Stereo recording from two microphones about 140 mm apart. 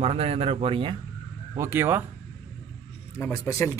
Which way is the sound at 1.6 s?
20° right (ahead or behind).